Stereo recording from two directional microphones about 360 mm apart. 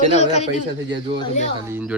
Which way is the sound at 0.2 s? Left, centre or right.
Centre.